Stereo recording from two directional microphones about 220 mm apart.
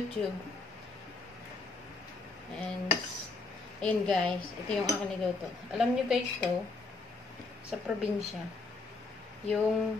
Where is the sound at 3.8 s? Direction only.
5° left (ahead or behind).